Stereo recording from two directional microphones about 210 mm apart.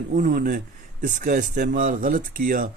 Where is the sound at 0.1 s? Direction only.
40° right (ahead or behind).